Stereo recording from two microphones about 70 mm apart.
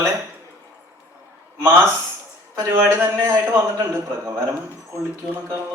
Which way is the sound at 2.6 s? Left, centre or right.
Right.